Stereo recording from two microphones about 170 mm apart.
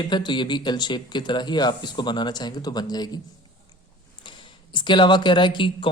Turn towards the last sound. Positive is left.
turn(degrees=30)  # may be behind; listen again after turning